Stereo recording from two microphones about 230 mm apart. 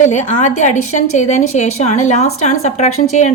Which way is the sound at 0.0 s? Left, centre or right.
Left.